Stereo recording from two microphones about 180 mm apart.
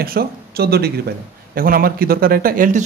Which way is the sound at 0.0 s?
55° right (ahead or behind).